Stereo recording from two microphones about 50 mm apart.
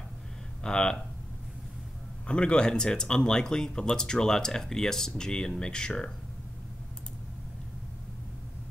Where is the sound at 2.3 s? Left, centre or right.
Left.